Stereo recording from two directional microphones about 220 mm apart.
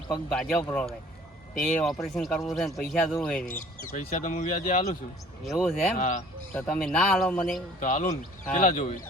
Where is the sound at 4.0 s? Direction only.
35° left (ahead or behind).